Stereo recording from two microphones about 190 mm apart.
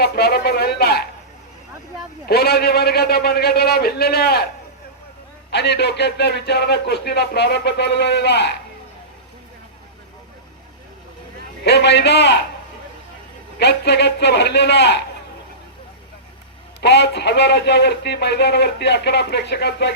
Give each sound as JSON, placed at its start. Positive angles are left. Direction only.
{"t": 0.0, "sound": "speech", "side_deg": 55}
{"t": 2.2, "sound": "speech", "side_deg": 55}
{"t": 5.5, "sound": "speech", "side_deg": 60}
{"t": 11.6, "sound": "speech", "side_deg": 65}
{"t": 13.6, "sound": "speech", "side_deg": 60}
{"t": 16.8, "sound": "speech", "side_deg": 60}